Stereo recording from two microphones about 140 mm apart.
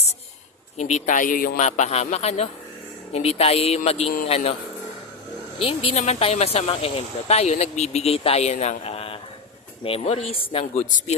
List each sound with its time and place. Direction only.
0.8 s a man's voice: 55° left (ahead or behind)
5.5 s speech: 40° left (ahead or behind); by 11.1 s 60° left (ahead or behind)